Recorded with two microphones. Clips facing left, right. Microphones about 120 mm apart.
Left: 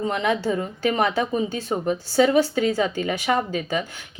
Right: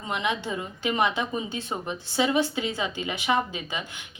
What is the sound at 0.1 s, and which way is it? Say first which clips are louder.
A woman's voice: left 2 dB; 40° left (ahead or behind).